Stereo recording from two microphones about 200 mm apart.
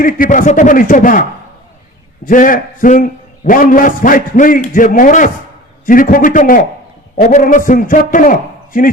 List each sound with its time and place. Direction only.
0.0 s a man's voice: 40° left (ahead or behind)
2.2 s a man's voice: 45° left (ahead or behind)